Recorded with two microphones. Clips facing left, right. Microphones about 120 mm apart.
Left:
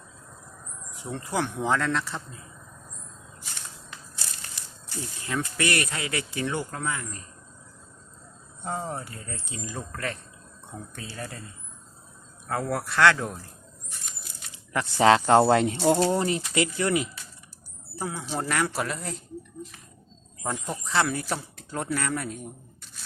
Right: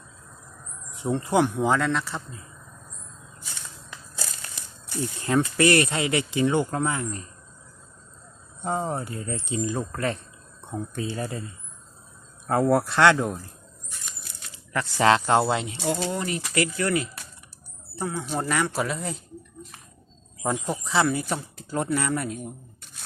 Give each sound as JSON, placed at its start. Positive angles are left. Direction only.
{"t": 0.9, "sound": "speech", "side_deg": -25}
{"t": 1.5, "sound": "speech", "side_deg": -5}
{"t": 5.2, "sound": "speech", "side_deg": -35}
{"t": 8.6, "sound": "speech", "side_deg": -25}
{"t": 12.5, "sound": "speech", "side_deg": -30}
{"t": 14.5, "sound": "a sound", "side_deg": 15}
{"t": 15.0, "sound": "speech", "side_deg": 35}
{"t": 15.4, "sound": "speech", "side_deg": 45}
{"t": 18.0, "sound": "speech", "side_deg": 5}
{"t": 20.4, "sound": "speech", "side_deg": -5}